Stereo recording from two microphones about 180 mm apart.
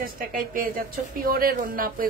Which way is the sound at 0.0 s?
50° right (ahead or behind).